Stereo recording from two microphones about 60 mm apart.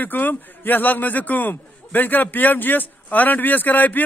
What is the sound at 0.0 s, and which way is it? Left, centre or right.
A man's voice, left.